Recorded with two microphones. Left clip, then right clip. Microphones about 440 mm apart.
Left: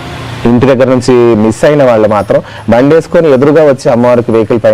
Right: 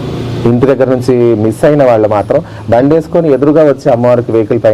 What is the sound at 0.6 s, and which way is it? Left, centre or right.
A woman's voice, left.